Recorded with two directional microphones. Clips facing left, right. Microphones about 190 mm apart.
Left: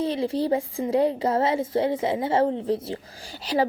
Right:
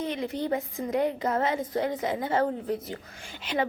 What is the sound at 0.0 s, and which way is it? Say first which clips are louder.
A woman's voice: left 6 dB; 30° left (ahead or behind).